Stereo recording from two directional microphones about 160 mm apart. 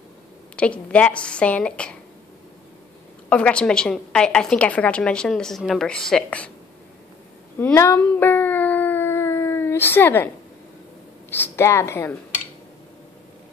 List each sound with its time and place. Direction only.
0.6 s a woman's voice: 10° left (ahead or behind)
3.3 s a woman's voice: 5° left (ahead or behind)
7.5 s a sound: 15° left (ahead or behind)
11.2 s a woman's voice: 15° left (ahead or behind)